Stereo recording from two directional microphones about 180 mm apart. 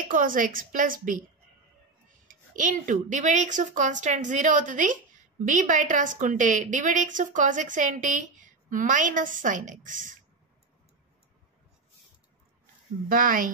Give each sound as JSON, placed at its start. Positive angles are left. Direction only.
{"t": 0.1, "sound": "a woman's voice", "side_deg": -50}
{"t": 2.2, "sound": "a woman's voice", "side_deg": -45}
{"t": 13.1, "sound": "a woman's voice", "side_deg": -50}